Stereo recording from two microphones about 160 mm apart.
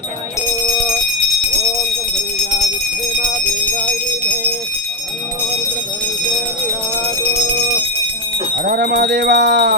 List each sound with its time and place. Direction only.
8.6 s jingle bell: 80° right